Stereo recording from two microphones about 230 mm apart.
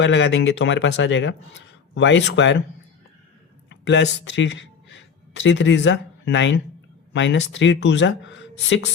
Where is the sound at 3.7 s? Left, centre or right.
Left.